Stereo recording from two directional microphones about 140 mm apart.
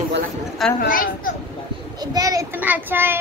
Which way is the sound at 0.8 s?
80° left.